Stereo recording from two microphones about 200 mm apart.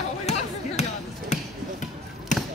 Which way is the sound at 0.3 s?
30° left (ahead or behind).